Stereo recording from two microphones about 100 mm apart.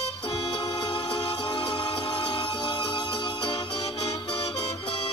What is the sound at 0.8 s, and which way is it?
Music, 55° left (ahead or behind).